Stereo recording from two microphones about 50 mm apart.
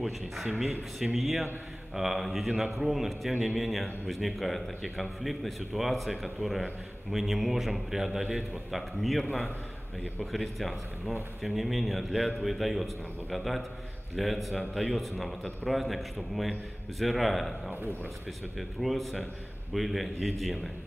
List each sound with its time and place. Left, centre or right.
0.9 s a man's voice: centre
8.2 s a man's voice: centre
8.7 s a man's voice: centre
17.0 s a man's voice: centre
18.6 s a man's voice: centre